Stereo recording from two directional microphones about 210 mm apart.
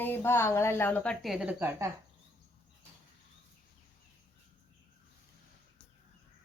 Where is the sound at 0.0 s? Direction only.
10° left (ahead or behind); by 1.9 s 10° right (ahead or behind).